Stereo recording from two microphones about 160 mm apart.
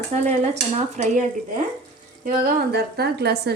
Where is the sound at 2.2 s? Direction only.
65° right (ahead or behind); by 3.6 s 90° right.